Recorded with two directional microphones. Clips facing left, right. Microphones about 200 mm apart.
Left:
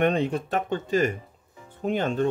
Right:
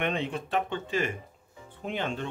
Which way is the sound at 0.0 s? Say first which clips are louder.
Left 7 dB; 40° left (ahead or behind).